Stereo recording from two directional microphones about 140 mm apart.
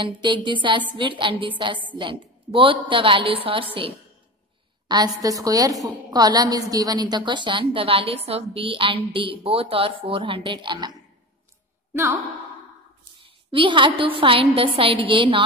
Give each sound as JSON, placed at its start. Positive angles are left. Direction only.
{"t": 0.0, "sound": "a woman's voice", "side_deg": -35}
{"t": 4.8, "sound": "a woman's voice", "side_deg": -30}
{"t": 11.9, "sound": "a woman's voice", "side_deg": -20}
{"t": 13.5, "sound": "a woman's voice", "side_deg": -35}